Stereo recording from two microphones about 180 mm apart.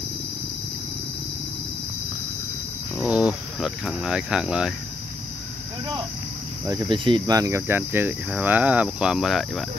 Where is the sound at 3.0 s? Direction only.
5° right (ahead or behind).